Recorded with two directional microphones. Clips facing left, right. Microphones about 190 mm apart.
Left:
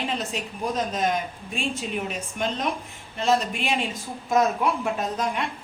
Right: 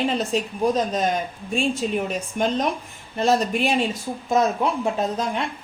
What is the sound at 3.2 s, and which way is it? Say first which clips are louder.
Speech: right 3 dB; 40° right (ahead or behind).